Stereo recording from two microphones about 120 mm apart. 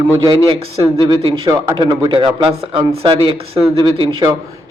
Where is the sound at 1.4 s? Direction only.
25° right (ahead or behind).